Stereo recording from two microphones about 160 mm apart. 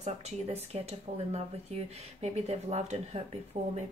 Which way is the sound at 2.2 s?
40° right (ahead or behind).